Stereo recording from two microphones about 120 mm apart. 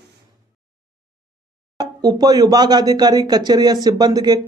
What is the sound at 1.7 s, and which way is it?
Speech, 35° right (ahead or behind).